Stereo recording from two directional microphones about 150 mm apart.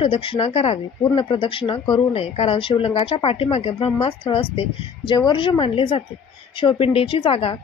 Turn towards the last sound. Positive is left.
turn(degrees=35)  # may be behind; listen again after turning